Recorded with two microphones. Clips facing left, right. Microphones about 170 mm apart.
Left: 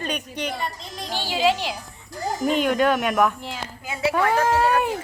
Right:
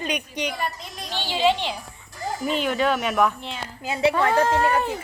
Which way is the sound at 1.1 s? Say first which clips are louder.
Even; 10° left (ahead or behind).